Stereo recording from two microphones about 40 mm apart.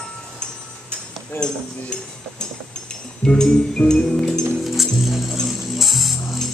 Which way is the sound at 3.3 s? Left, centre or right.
Left.